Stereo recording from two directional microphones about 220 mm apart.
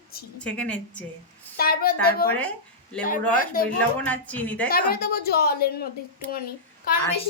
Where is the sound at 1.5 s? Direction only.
45° left (ahead or behind).